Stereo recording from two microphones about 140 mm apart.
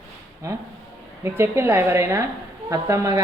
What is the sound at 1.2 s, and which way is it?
A woman's voice, 15° right (ahead or behind).